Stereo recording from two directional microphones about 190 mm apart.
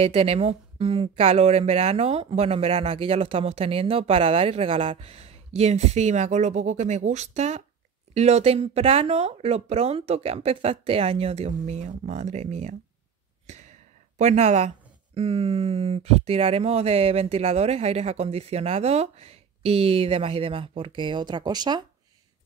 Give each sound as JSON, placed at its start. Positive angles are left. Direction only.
{"t": 0.0, "sound": "speech", "side_deg": -30}
{"t": 13.5, "sound": "a sound", "side_deg": -40}
{"t": 15.1, "sound": "speech", "side_deg": -30}